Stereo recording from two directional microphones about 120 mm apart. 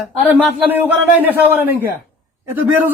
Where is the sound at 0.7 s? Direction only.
15° right (ahead or behind).